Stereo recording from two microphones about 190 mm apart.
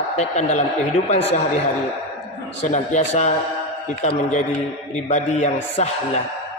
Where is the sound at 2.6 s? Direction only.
40° left (ahead or behind).